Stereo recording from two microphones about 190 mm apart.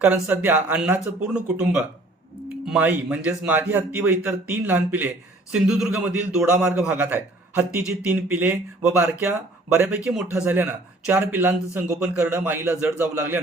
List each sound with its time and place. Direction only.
0.0 s speech: 10° right (ahead or behind)